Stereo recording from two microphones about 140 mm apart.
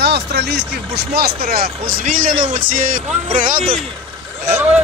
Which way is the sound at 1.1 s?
90° right.